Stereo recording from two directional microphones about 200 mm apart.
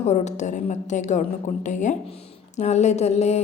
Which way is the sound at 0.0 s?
35° left (ahead or behind).